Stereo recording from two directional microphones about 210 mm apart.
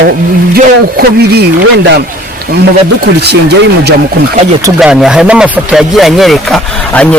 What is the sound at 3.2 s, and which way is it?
Speech, 50° right (ahead or behind).